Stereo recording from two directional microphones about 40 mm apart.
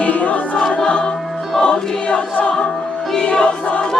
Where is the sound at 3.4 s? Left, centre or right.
Left.